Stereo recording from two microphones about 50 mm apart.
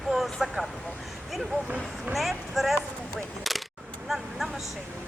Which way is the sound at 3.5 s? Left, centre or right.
Centre.